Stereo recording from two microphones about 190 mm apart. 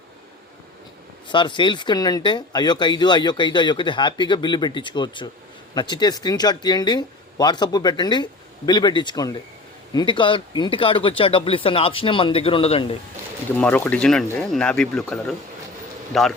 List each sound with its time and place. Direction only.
1.3 s speech: 25° left (ahead or behind)
13.6 s speech: 5° left (ahead or behind)